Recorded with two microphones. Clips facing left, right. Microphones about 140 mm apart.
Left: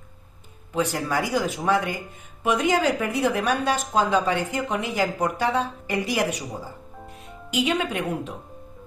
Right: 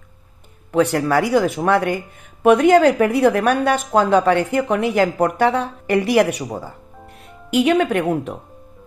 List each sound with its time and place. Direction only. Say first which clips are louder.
0.7 s a woman's voice: right 8 dB; 60° right (ahead or behind)